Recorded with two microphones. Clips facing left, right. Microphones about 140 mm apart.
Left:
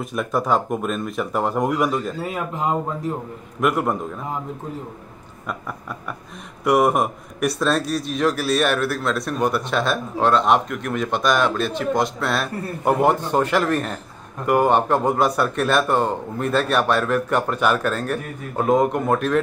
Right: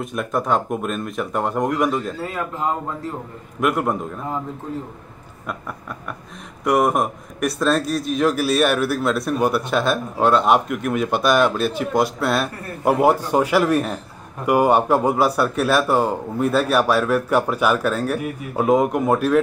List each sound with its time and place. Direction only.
0.0 s a man's voice: centre (ahead or behind)
2.2 s speech: 15° left (ahead or behind)
3.6 s a man's voice: centre (ahead or behind)
6.6 s a man's voice: centre (ahead or behind)